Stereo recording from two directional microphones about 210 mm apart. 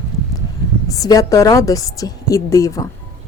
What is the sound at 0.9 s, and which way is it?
A woman's voice, 15° left (ahead or behind).